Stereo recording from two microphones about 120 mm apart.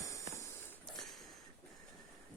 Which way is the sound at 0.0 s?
25° left (ahead or behind).